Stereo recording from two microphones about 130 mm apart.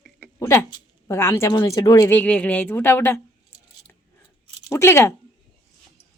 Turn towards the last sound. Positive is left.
turn(degrees=20)  # may be behind; listen again after turning